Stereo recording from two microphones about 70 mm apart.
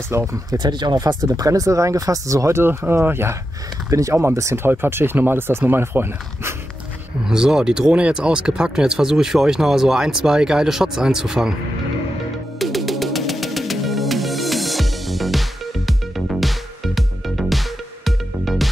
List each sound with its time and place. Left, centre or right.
0.1 s speech: right
0.5 s speech: right
3.9 s speech: right
4.6 s speech: right
7.2 s speech: centre
12.5 s music: centre